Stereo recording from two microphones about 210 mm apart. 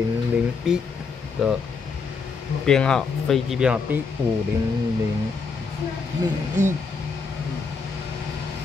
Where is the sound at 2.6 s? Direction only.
5° left (ahead or behind).